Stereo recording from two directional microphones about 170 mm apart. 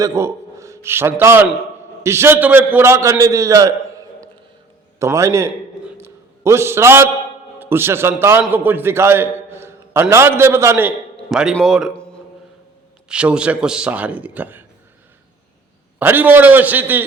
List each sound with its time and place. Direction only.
0.0 s a man's voice: 15° right (ahead or behind)
5.8 s a sound: 15° right (ahead or behind)
7.6 s a man's voice: 15° right (ahead or behind)
11.3 s speech: centre (ahead or behind)
13.1 s speech: 5° right (ahead or behind)
16.0 s speech: 10° right (ahead or behind)